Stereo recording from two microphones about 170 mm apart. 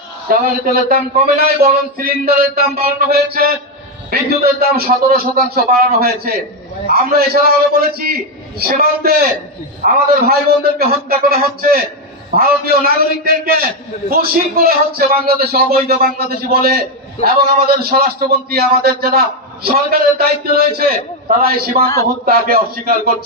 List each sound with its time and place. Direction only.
0.3 s a man's voice: 55° right (ahead or behind)